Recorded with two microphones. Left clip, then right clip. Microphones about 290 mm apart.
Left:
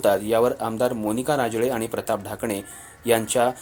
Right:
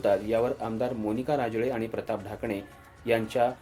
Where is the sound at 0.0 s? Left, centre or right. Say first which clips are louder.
Left 6 dB; left.